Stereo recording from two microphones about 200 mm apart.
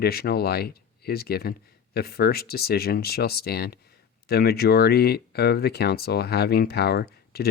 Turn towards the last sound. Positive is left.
turn(degrees=50)  # may be behind; listen again after turning